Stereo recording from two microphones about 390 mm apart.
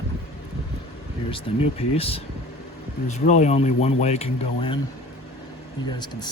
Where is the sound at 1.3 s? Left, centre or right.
Centre.